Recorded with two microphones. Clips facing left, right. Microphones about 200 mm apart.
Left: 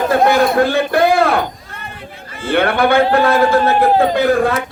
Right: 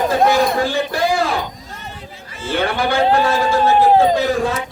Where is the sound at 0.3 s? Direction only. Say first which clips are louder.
Left 3 dB; 60° left (ahead or behind).